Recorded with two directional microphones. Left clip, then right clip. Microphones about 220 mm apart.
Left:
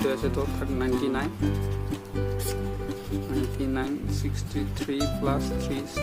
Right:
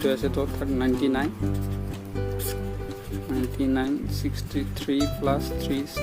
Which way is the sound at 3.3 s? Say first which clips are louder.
Right 2 dB; 25° right (ahead or behind).